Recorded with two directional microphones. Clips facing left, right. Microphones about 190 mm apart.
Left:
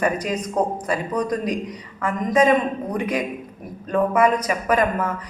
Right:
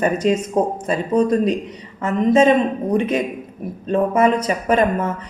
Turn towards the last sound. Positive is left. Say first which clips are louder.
# right 3 dB
turn(degrees=-25)  # may be behind; listen again after turning